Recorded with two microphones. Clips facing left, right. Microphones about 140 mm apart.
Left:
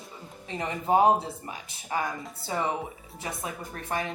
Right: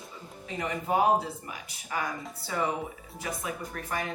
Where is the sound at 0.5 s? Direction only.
30° left (ahead or behind).